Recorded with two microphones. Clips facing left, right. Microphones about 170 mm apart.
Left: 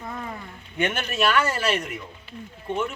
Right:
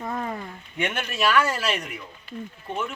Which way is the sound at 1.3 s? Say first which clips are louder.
Right 1 dB; centre (ahead or behind).